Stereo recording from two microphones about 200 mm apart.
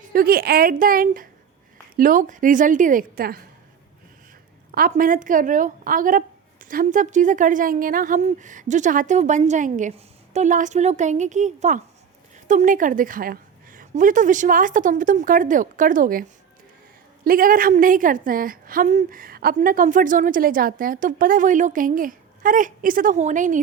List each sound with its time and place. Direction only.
0.1 s a woman's voice: 50° right (ahead or behind)
4.7 s a woman's voice: 45° right (ahead or behind)
17.2 s a woman's voice: 45° right (ahead or behind)